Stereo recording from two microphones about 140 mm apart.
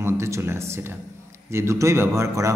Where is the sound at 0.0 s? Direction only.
20° right (ahead or behind).